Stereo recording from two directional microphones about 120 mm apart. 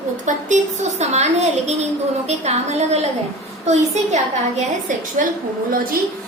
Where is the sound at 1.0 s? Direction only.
65° right (ahead or behind).